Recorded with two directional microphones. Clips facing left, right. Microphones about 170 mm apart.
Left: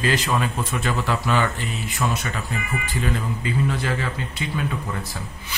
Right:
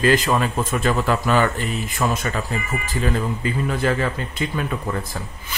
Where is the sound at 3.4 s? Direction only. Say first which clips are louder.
Right 1 dB; 50° right (ahead or behind).